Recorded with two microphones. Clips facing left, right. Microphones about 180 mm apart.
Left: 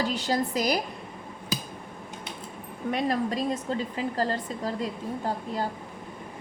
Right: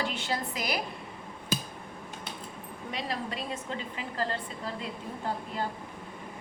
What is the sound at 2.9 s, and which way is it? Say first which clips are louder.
Speech: left 8 dB; 50° left (ahead or behind).